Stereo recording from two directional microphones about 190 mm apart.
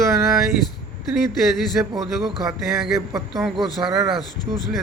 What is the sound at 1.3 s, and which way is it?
Speech, centre (ahead or behind).